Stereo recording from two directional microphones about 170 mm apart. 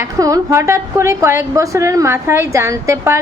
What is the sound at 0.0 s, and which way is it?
A woman's voice, 20° right (ahead or behind).